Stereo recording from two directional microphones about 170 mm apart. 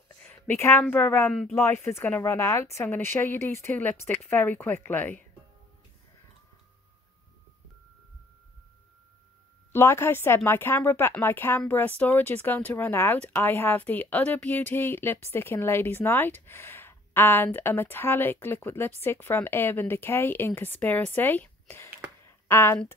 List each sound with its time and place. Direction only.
0.2 s speech: 10° left (ahead or behind)
9.7 s speech: 15° left (ahead or behind)